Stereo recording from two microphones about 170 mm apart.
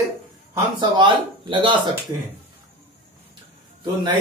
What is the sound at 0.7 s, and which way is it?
Speech, 30° right (ahead or behind).